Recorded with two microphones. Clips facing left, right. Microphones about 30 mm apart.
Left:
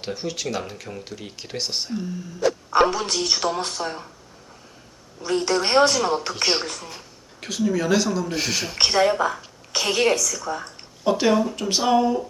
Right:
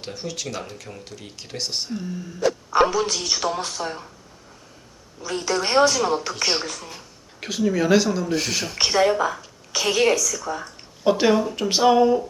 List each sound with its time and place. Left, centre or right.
0.0 s speech: centre
2.9 s speech: centre
5.4 s speech: centre
7.4 s speech: centre
8.3 s speech: centre
10.4 s speech: centre
11.0 s speech: centre